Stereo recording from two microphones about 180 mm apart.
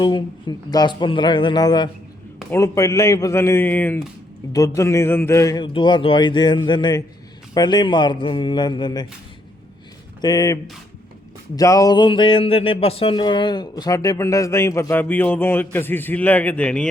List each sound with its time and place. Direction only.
0.0 s a man's voice: 25° left (ahead or behind)
10.2 s a man's voice: 20° left (ahead or behind); by 16.9 s 5° left (ahead or behind)